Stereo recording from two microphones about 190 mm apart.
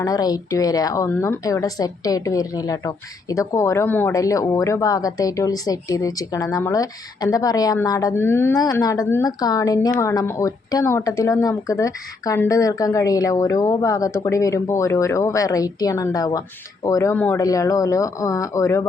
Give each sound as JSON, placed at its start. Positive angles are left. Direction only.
{"t": 0.0, "sound": "a woman's voice", "side_deg": 20}